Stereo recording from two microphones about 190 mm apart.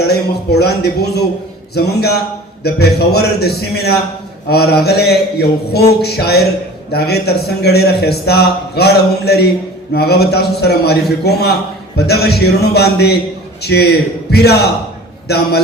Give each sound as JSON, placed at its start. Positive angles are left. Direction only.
{"t": 0.1, "sound": "a man's voice", "side_deg": 60}